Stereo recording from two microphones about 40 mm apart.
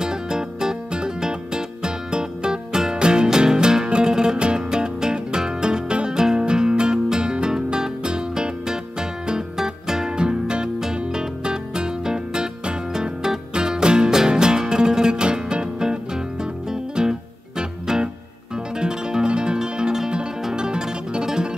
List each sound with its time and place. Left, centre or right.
0.0 s music: centre